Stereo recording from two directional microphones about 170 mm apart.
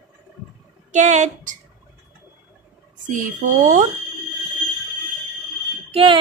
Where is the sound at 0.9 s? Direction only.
45° right (ahead or behind).